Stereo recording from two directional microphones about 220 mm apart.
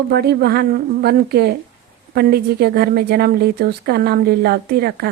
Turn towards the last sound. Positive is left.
turn(degrees=-45)  # may be behind; listen again after turning